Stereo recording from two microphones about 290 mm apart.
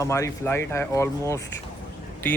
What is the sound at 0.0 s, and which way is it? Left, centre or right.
A woman's voice, centre.